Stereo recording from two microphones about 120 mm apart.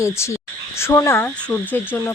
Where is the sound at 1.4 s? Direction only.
15° left (ahead or behind).